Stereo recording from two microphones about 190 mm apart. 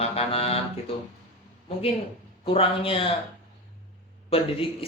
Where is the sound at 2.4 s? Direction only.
30° left (ahead or behind).